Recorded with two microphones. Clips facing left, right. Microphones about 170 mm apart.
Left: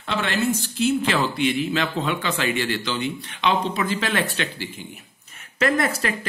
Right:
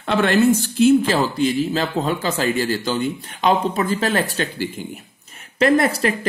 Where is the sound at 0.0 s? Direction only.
50° right (ahead or behind).